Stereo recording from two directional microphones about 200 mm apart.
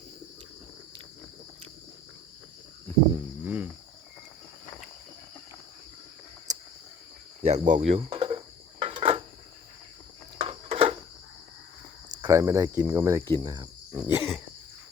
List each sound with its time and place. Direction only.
3.4 s cricket: 10° right (ahead or behind)
6.5 s cricket: 20° right (ahead or behind)
7.4 s speech: 35° right (ahead or behind)
8.8 s cricket: 25° right (ahead or behind)
10.3 s a sound: 30° right (ahead or behind)
12.2 s cricket: 15° right (ahead or behind)